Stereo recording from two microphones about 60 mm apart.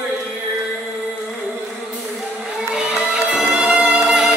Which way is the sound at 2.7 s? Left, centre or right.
Centre.